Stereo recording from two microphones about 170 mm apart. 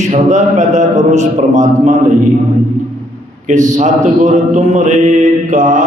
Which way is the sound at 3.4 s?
45° right (ahead or behind).